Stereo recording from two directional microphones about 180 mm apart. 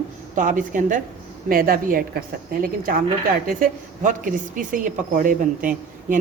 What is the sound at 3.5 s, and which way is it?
A woman's voice, 50° right (ahead or behind).